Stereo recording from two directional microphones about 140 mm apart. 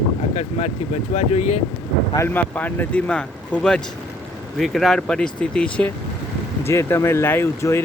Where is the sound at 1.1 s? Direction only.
55° left (ahead or behind).